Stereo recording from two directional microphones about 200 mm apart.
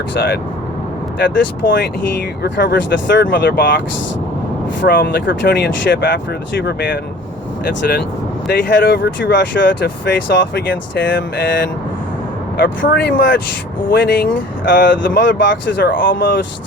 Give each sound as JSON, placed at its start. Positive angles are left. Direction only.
{"t": 0.1, "sound": "speech", "side_deg": 60}
{"t": 3.2, "sound": "speech", "side_deg": 50}
{"t": 8.4, "sound": "speech", "side_deg": 50}
{"t": 12.8, "sound": "speech", "side_deg": 60}
{"t": 14.7, "sound": "speech", "side_deg": 45}
{"t": 15.2, "sound": "speech", "side_deg": 65}
{"t": 15.9, "sound": "speech", "side_deg": 45}
{"t": 16.2, "sound": "speech", "side_deg": 60}